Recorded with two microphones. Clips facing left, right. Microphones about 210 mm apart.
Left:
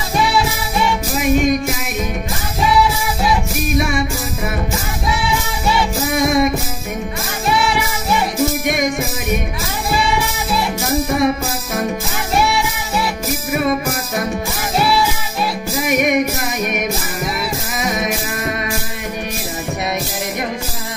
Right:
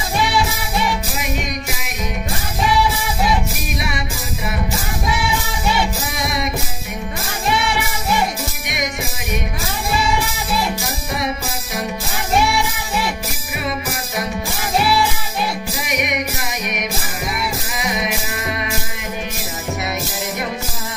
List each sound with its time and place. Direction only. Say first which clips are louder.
6.1 s music: left 13 dB; 45° left (ahead or behind)
11.1 s music: left 7 dB; 50° left (ahead or behind)
15.9 s music: left 8 dB; 50° left (ahead or behind)